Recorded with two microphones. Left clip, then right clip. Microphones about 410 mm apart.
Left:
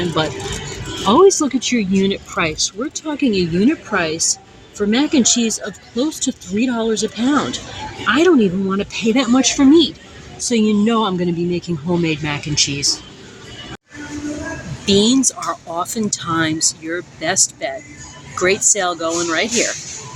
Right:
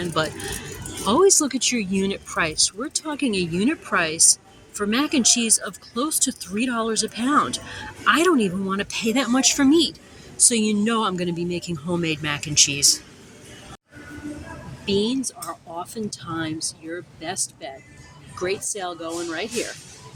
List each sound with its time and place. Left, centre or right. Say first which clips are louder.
0.2 s speech: left 5 dB; right
14.8 s speech: left 9 dB; right